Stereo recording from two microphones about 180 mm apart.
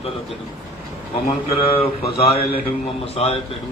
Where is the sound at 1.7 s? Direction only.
30° left (ahead or behind).